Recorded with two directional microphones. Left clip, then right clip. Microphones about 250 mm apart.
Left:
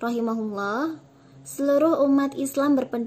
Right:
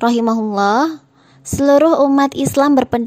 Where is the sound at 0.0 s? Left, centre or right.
Right.